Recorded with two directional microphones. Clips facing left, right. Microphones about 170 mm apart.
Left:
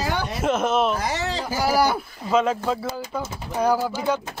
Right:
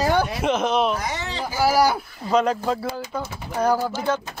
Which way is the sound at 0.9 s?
35° left (ahead or behind).